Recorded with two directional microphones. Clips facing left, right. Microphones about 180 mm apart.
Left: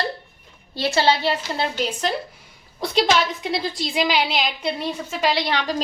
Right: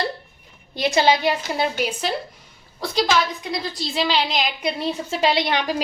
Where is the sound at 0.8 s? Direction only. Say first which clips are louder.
Right 1 dB; 15° right (ahead or behind).